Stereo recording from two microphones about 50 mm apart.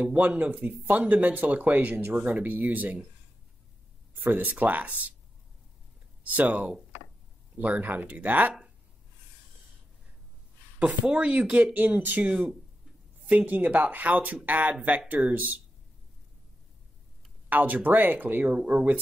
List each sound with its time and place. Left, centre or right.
0.0 s speech: right
4.1 s speech: right
6.2 s speech: right
10.8 s speech: right
17.5 s speech: right